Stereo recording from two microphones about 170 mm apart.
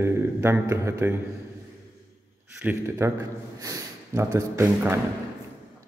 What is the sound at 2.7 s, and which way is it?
Speech, 15° right (ahead or behind).